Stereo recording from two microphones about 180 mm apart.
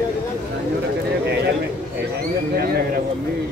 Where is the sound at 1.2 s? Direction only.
65° right (ahead or behind).